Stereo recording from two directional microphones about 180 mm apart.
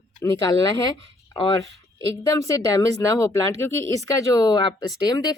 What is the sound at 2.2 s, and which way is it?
Speech, 20° left (ahead or behind).